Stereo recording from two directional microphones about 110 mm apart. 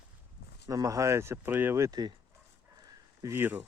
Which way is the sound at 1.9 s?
40° right (ahead or behind).